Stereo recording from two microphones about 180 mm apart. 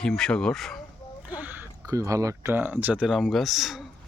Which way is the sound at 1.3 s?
10° right (ahead or behind).